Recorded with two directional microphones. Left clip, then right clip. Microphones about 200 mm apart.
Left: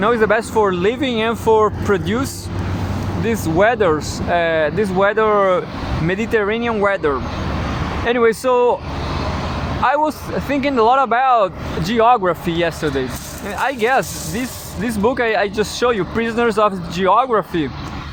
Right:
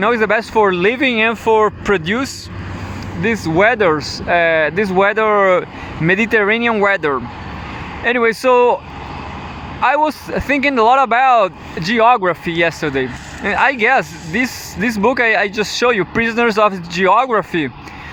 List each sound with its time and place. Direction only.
0.0 s speech: 45° right (ahead or behind)
9.8 s speech: 50° right (ahead or behind)